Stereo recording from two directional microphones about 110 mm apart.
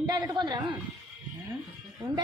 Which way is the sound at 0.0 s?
40° right (ahead or behind).